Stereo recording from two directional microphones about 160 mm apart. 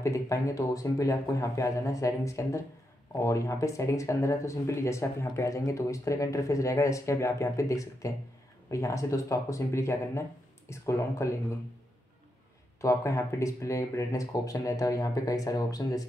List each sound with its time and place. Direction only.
0.0 s speech: 20° left (ahead or behind)
12.8 s speech: 20° left (ahead or behind)